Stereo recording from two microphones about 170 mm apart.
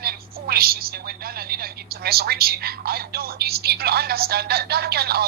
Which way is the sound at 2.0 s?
65° right (ahead or behind).